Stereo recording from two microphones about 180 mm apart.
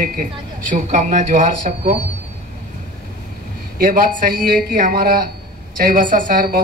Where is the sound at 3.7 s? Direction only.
50° right (ahead or behind).